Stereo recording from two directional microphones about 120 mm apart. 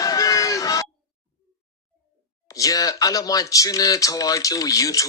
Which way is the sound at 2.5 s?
30° left (ahead or behind).